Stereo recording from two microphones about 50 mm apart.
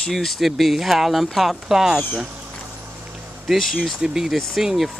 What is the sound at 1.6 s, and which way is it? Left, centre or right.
Speech, centre.